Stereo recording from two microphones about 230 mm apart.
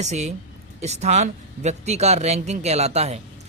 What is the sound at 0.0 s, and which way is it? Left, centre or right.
A man's voice, right.